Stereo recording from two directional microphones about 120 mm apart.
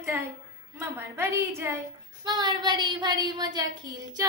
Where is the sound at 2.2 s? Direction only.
35° right (ahead or behind).